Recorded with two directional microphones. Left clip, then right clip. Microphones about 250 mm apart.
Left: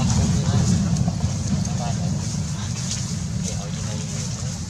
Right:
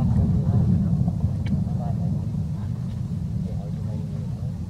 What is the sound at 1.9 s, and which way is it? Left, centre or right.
Vehicle, centre.